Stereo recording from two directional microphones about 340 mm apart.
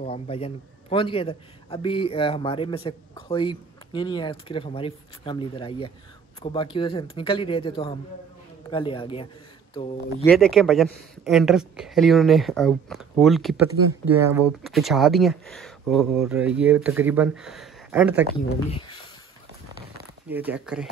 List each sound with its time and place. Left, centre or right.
0.0 s a man's voice: centre
10.2 s speech: centre
20.2 s speech: centre